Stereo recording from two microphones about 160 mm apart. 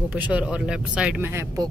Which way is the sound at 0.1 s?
10° right (ahead or behind).